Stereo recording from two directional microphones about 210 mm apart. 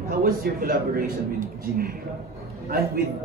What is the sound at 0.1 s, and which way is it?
Speech, 45° right (ahead or behind).